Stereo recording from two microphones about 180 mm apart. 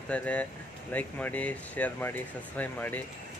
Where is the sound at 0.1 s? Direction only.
5° left (ahead or behind).